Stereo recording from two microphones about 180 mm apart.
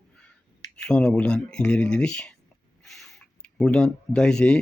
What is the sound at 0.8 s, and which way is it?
Speech, 5° left (ahead or behind).